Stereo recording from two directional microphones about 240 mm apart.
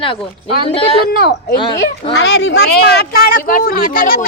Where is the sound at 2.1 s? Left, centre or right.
Left.